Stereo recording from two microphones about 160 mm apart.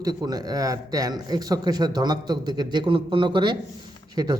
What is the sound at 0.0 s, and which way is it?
Speech, 25° right (ahead or behind).